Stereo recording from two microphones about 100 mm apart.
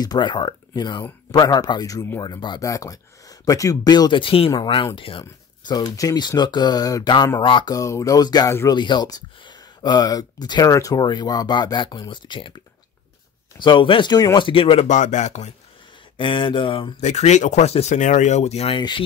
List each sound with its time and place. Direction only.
0.0 s speech: 45° left (ahead or behind)
2.6 s speech: 35° left (ahead or behind); by 5.2 s 60° left (ahead or behind)
5.7 s speech: 40° left (ahead or behind)
7.3 s speech: 50° left (ahead or behind)
7.7 s speech: 35° left (ahead or behind)
14.5 s speech: 65° left (ahead or behind)
16.2 s speech: 55° left (ahead or behind)
17.2 s speech: 90° left
18.8 s speech: 50° left (ahead or behind)